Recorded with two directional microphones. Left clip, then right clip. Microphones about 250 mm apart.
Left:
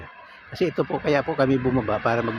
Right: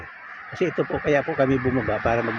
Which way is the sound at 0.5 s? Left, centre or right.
Centre.